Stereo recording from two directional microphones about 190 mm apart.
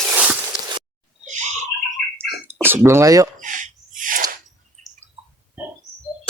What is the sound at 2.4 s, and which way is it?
Speech, 10° right (ahead or behind).